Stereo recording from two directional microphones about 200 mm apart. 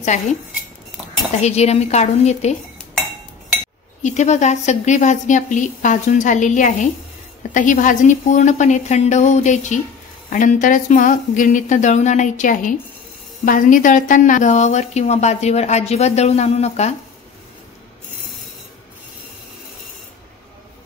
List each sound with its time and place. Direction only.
0.0 s a woman's voice: 35° left (ahead or behind)
1.4 s a woman's voice: 30° left (ahead or behind)
4.0 s a woman's voice: 35° left (ahead or behind)